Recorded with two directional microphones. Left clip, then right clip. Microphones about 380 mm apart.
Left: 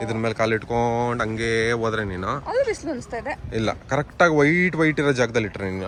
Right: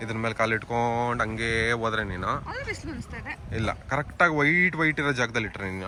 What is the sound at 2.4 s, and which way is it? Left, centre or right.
A woman's voice, centre.